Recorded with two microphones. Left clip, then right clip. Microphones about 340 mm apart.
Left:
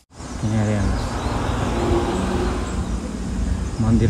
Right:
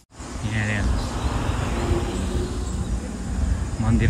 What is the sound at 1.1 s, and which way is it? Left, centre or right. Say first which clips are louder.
Vehicle: left 4 dB; left.